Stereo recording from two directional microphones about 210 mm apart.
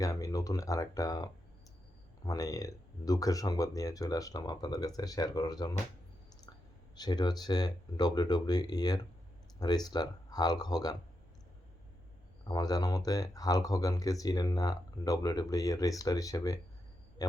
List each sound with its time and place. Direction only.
0.0 s speech: 15° left (ahead or behind)
6.9 s speech: 20° left (ahead or behind)
12.5 s speech: 20° left (ahead or behind)